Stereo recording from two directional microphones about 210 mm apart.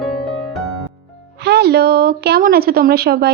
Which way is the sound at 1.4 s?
50° right (ahead or behind).